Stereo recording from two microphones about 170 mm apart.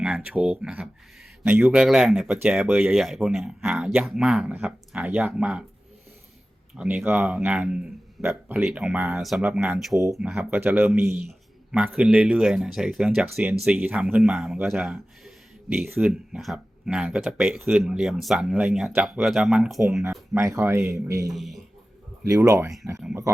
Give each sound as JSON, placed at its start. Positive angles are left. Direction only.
{"t": 0.0, "sound": "speech", "side_deg": -10}
{"t": 6.7, "sound": "speech", "side_deg": -10}
{"t": 9.7, "sound": "speech", "side_deg": 0}
{"t": 20.3, "sound": "speech", "side_deg": -20}
{"t": 21.2, "sound": "speech", "side_deg": 0}
{"t": 22.3, "sound": "speech", "side_deg": -20}